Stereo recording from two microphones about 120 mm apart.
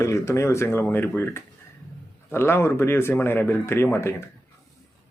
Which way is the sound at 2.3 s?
20° left (ahead or behind).